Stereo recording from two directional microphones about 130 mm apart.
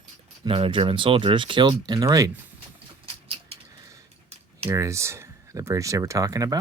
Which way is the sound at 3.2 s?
50° right (ahead or behind).